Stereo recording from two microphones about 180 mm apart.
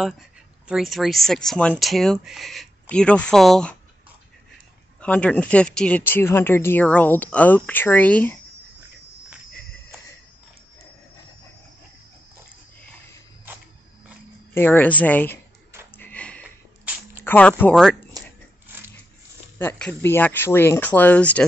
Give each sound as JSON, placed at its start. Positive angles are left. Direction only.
{"t": 0.7, "sound": "speech", "side_deg": 0}
{"t": 5.0, "sound": "speech", "side_deg": 10}
{"t": 14.5, "sound": "speech", "side_deg": 10}
{"t": 16.0, "sound": "sniff", "side_deg": 10}
{"t": 17.2, "sound": "speech", "side_deg": 10}
{"t": 19.6, "sound": "speech", "side_deg": 10}